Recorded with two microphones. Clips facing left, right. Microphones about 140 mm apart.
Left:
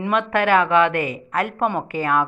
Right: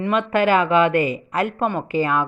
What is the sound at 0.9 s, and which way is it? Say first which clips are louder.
Speech: right 4 dB; 65° left (ahead or behind).